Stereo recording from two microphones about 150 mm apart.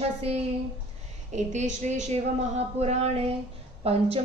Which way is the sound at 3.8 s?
40° right (ahead or behind).